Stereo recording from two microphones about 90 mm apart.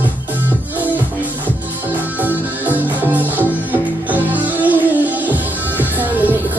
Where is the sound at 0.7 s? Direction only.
20° right (ahead or behind).